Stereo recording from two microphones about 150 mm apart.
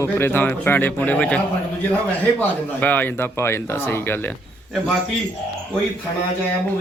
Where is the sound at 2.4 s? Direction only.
10° left (ahead or behind).